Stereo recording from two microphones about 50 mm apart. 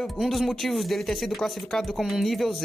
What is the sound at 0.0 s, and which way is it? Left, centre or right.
Speech, centre.